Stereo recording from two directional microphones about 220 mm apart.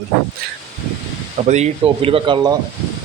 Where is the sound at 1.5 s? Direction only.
25° right (ahead or behind).